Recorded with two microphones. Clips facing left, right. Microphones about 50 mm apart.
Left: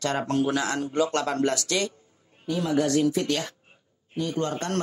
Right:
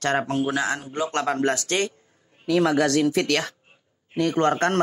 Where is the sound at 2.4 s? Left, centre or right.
Right.